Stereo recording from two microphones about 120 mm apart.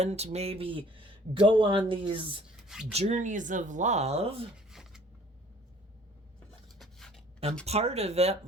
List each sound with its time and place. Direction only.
0.0 s speech: 65° right (ahead or behind); by 2.4 s 45° right (ahead or behind)
2.9 s speech: 65° right (ahead or behind)
4.5 s a sound: 5° right (ahead or behind)
6.7 s writing: centre (ahead or behind)
7.6 s speech: 60° right (ahead or behind)